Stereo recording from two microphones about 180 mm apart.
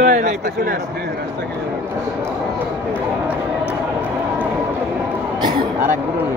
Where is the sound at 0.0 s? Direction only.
45° right (ahead or behind).